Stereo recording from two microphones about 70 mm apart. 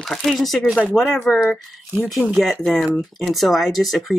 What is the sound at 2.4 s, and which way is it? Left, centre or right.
Speech, centre.